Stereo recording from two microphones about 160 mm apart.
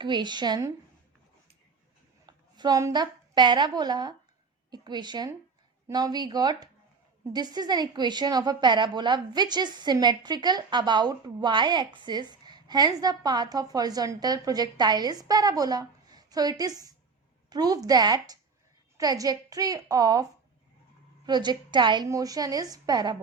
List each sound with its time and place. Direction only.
0.0 s a woman's voice: 30° right (ahead or behind)
2.2 s a woman's voice: 25° right (ahead or behind)
21.2 s a woman's voice: 25° right (ahead or behind)